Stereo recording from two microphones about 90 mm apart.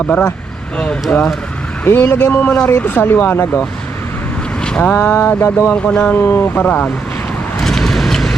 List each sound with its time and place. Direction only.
1.1 s speech: 15° left (ahead or behind)
4.6 s speech: 10° left (ahead or behind)
6.1 s speech: 25° left (ahead or behind)
7.6 s vehicle: 5° left (ahead or behind)